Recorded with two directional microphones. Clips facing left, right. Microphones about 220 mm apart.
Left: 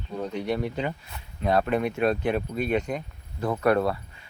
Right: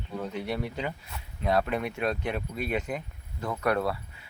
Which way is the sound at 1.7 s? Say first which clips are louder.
Left 5 dB; 40° left (ahead or behind).